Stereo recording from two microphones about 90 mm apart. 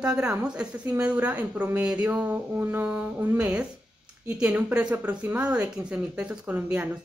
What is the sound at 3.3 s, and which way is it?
A woman's voice, 10° right (ahead or behind).